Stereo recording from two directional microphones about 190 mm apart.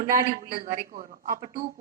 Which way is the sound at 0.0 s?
55° right (ahead or behind).